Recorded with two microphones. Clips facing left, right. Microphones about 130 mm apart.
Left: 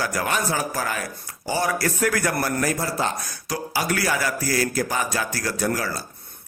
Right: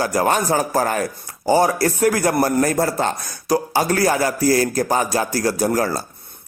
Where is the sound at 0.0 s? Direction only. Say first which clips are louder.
Right 6 dB; 35° right (ahead or behind).